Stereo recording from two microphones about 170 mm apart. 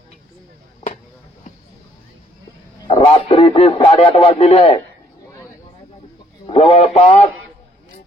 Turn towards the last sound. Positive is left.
turn(degrees=35)  # may be behind; listen again after turning